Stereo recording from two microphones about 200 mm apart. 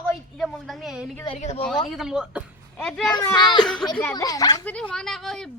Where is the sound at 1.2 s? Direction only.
30° left (ahead or behind).